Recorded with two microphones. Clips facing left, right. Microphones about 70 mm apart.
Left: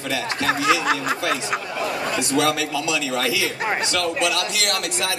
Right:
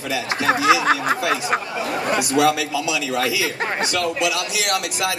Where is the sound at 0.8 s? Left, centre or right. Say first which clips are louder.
Right 3 dB; right.